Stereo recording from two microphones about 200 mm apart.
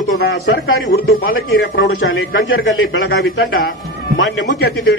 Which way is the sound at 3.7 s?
75° left (ahead or behind).